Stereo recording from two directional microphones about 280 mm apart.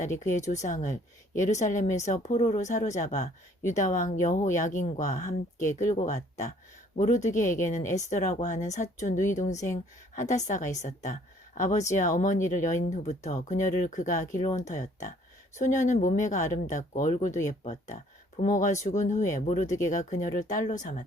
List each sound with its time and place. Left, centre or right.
0.0 s speech: left